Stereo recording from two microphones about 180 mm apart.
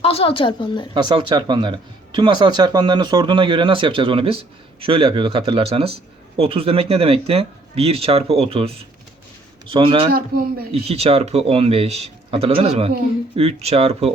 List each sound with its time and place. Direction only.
0.0 s a woman's voice: 35° left (ahead or behind)
0.9 s speech: 25° right (ahead or behind)
10.1 s a man's voice: 55° right (ahead or behind)
10.7 s speech: 35° right (ahead or behind)